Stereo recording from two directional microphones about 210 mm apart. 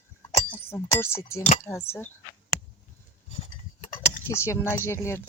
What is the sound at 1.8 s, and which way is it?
Speech, 10° left (ahead or behind).